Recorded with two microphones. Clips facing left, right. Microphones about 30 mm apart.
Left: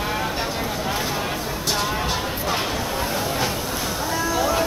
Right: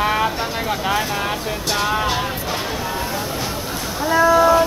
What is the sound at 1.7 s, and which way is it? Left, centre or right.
Music, centre.